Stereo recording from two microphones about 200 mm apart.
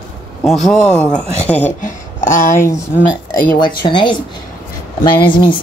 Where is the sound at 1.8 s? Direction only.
40° left (ahead or behind).